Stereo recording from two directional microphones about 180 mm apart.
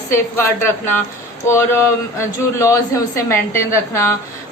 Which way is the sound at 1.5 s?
15° left (ahead or behind).